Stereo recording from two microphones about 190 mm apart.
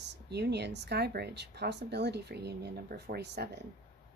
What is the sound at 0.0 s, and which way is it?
Speech, 60° right (ahead or behind).